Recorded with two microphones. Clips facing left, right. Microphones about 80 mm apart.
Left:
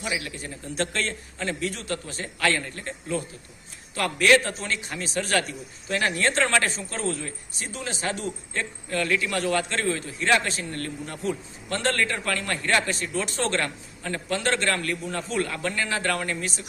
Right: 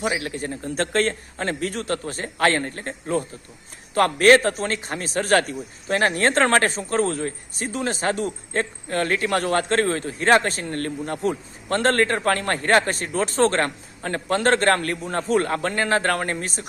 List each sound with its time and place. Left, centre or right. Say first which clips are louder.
0.0 s a man's voice: right 6 dB; right